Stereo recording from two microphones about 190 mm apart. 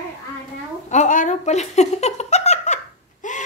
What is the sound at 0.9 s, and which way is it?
Giggle, 40° left (ahead or behind).